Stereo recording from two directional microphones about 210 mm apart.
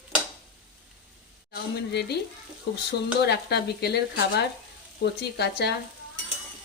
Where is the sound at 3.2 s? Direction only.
50° left (ahead or behind).